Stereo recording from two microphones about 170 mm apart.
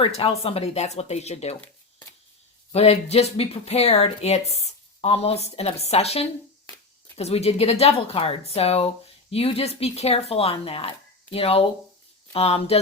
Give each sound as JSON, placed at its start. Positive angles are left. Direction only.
{"t": 0.0, "sound": "speech", "side_deg": 35}
{"t": 2.7, "sound": "speech", "side_deg": 40}